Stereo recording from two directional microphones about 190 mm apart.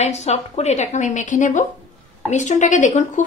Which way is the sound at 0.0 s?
35° left (ahead or behind).